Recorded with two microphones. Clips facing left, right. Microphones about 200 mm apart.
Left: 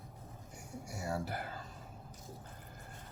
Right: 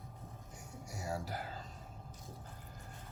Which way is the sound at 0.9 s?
60° left (ahead or behind).